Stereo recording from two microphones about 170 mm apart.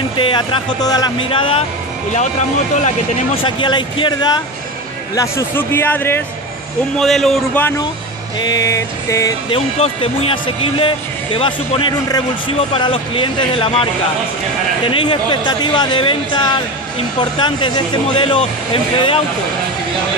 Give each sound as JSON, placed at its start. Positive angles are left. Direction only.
{"t": 0.2, "sound": "speech", "side_deg": 30}
{"t": 3.4, "sound": "speech", "side_deg": 30}
{"t": 7.0, "sound": "a man's voice", "side_deg": 0}
{"t": 8.4, "sound": "speech", "side_deg": 25}
{"t": 9.5, "sound": "speech", "side_deg": 35}
{"t": 14.9, "sound": "speech", "side_deg": 30}